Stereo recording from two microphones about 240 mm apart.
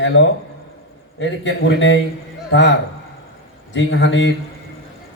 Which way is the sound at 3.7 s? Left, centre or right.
Left.